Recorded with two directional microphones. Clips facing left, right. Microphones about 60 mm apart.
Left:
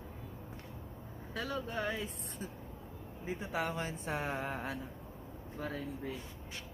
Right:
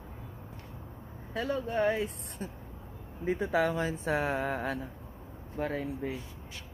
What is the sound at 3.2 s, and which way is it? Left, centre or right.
Speech, right.